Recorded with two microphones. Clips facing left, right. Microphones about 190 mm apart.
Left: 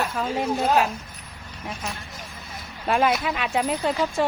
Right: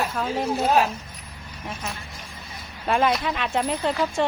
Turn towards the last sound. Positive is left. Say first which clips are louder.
# even
turn(degrees=5)  # may be behind; listen again after turning